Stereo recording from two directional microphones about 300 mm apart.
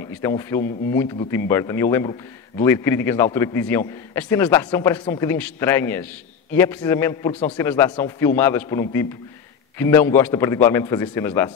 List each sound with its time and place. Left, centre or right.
0.2 s a man's voice: centre